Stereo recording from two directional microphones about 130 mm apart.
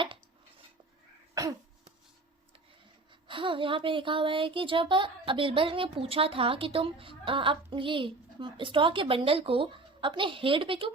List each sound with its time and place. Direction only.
3.1 s speech: 40° right (ahead or behind)